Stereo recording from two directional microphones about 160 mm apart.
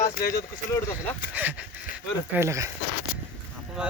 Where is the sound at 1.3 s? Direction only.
10° right (ahead or behind).